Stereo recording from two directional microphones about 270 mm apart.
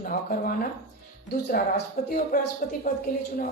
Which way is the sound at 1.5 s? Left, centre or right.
Left.